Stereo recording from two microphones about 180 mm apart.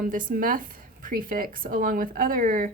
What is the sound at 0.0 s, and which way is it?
A woman's voice, 50° right (ahead or behind).